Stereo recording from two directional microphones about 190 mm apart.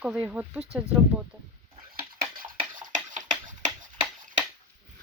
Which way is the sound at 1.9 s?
50° right (ahead or behind).